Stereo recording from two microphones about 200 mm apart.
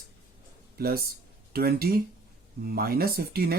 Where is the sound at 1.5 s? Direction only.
50° right (ahead or behind).